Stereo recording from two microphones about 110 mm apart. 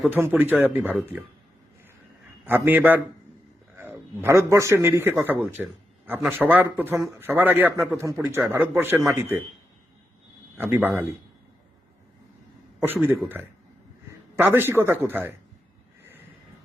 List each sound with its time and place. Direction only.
0.1 s a man's voice: 20° right (ahead or behind)
2.5 s a man's voice: 15° right (ahead or behind)
10.6 s a man's voice: 15° right (ahead or behind)
12.8 s a man's voice: 20° right (ahead or behind)
14.3 s a man's voice: 20° right (ahead or behind)